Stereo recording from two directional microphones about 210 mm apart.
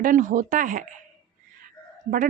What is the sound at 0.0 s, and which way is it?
Speech, 40° right (ahead or behind).